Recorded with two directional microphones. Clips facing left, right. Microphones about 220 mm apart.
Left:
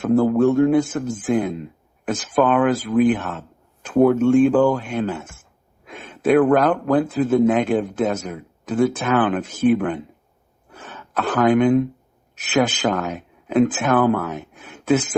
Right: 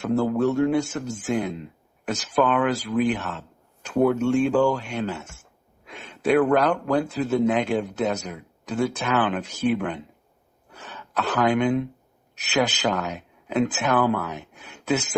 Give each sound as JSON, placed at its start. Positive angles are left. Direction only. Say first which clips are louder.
{"t": 0.0, "sound": "speech", "louder": "left 6 dB", "side_deg": 50}
{"t": 10.7, "sound": "a sound", "louder": "left 3 dB", "side_deg": 50}
{"t": 12.4, "sound": "speech", "louder": "left 4 dB", "side_deg": 50}